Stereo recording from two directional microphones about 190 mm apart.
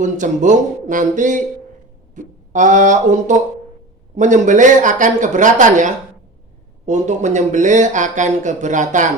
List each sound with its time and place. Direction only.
0.0 s speech: 40° right (ahead or behind)